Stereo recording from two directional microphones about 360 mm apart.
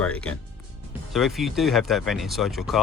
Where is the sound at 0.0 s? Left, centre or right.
Centre.